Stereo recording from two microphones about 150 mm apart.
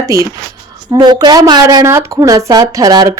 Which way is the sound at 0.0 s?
20° right (ahead or behind).